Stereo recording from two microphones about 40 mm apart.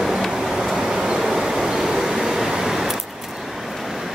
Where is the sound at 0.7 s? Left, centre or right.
Centre.